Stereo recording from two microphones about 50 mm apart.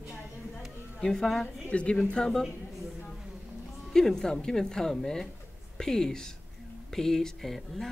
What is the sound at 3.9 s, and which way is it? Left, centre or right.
Speech, centre.